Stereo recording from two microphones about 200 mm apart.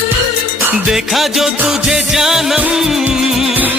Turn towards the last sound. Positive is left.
turn(degrees=-10)  # may be behind; listen again after turning